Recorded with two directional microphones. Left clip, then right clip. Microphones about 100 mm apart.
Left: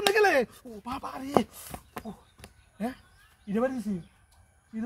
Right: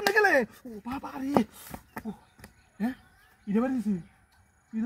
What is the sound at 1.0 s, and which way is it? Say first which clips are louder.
Speech: left 1 dB; 35° left (ahead or behind).